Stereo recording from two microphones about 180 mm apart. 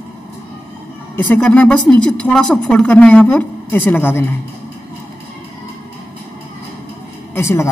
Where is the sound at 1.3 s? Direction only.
10° left (ahead or behind).